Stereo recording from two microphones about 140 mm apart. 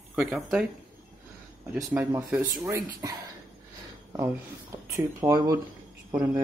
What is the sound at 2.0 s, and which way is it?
Speech, 10° right (ahead or behind).